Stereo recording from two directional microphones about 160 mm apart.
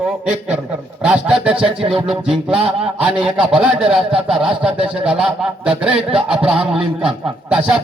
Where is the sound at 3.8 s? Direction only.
5° right (ahead or behind).